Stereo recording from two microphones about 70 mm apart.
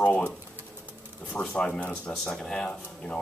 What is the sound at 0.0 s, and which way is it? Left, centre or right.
Speech, centre.